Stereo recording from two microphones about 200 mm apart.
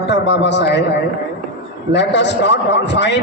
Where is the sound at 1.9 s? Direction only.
60° left (ahead or behind).